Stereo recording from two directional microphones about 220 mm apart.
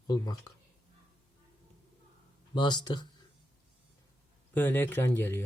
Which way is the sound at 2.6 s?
20° left (ahead or behind).